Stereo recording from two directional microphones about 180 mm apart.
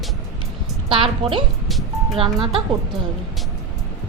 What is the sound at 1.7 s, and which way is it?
Music, centre (ahead or behind).